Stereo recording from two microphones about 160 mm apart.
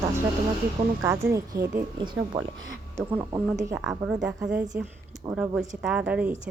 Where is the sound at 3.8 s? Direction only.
5° right (ahead or behind).